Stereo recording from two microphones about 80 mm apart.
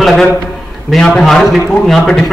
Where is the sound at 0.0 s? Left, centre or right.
Centre.